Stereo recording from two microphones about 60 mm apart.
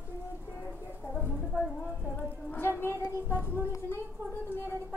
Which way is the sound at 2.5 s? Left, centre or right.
Left.